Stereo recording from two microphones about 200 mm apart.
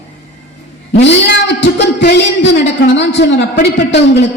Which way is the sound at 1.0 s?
60° left (ahead or behind).